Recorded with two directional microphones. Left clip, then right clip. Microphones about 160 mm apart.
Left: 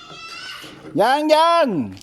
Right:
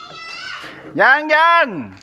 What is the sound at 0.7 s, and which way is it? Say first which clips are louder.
Speech: right 5 dB; 70° left (ahead or behind).